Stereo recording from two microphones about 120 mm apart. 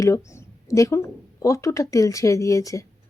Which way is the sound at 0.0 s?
25° left (ahead or behind).